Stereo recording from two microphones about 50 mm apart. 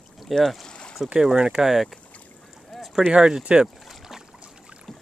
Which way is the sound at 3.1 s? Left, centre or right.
Centre.